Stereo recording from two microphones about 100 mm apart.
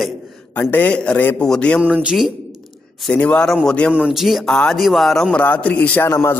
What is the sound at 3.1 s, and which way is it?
Speech, 10° left (ahead or behind).